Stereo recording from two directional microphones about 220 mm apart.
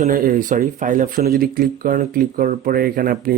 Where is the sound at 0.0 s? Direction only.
40° right (ahead or behind).